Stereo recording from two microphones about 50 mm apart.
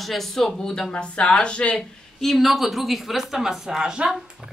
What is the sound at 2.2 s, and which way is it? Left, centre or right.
A woman's voice, centre.